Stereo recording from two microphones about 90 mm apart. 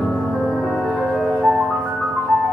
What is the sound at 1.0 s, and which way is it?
Music, centre (ahead or behind).